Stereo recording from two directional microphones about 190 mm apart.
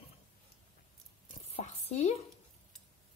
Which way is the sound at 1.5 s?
35° left (ahead or behind).